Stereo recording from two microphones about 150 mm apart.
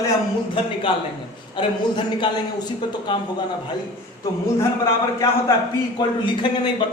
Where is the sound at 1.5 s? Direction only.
35° left (ahead or behind).